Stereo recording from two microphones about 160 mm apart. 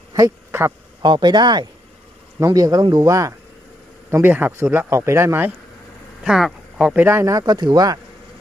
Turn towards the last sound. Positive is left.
turn(degrees=-25)  # may be behind; listen again after turning